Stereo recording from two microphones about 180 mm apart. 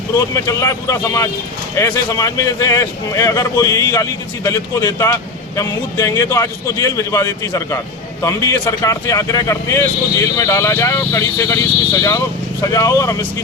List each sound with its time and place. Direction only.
0.1 s speech: 20° left (ahead or behind)
12.6 s speech: 20° left (ahead or behind)